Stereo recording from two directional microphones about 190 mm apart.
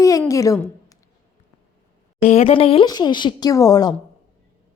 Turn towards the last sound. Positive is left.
turn(degrees=20)  # may be behind; listen again after turning